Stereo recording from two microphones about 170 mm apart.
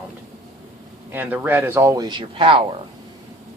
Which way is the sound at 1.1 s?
10° right (ahead or behind).